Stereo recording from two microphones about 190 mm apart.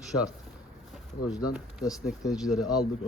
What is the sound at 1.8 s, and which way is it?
Speech, 20° left (ahead or behind).